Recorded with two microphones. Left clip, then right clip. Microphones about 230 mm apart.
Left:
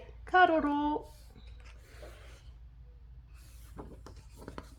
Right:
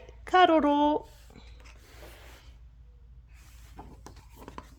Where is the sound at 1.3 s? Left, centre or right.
Right.